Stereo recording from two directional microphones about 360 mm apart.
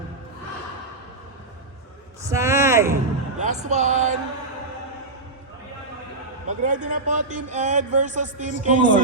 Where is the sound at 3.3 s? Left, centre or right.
Centre.